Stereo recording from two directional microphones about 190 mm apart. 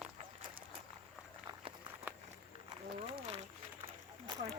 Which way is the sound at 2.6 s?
30° right (ahead or behind).